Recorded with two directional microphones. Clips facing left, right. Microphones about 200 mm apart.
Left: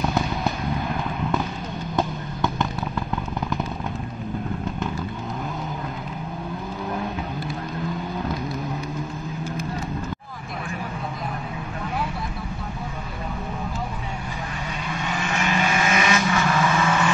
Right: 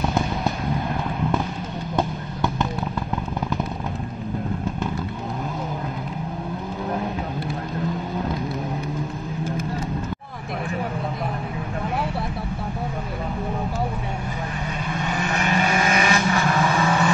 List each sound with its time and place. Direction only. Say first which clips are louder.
15.2 s vehicle: right 1 dB; 40° right (ahead or behind)